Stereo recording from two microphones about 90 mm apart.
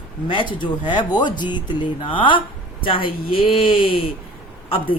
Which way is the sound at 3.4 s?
85° left.